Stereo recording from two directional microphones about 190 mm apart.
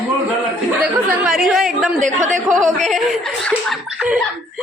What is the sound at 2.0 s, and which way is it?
Speech, 40° right (ahead or behind).